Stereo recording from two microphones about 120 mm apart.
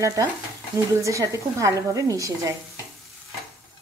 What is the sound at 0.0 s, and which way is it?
Speech, 25° right (ahead or behind).